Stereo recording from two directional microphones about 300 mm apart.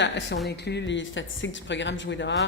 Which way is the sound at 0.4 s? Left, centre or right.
Left.